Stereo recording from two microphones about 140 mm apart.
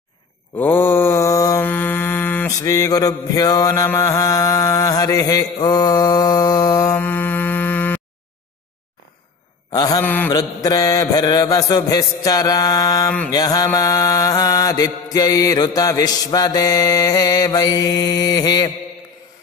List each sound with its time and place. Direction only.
0.6 s mantra: 15° left (ahead or behind)
7.0 s mantra: 15° left (ahead or behind)
9.7 s mantra: 30° left (ahead or behind)
10.0 s a sound: 15° left (ahead or behind)
10.3 s mantra: 25° left (ahead or behind)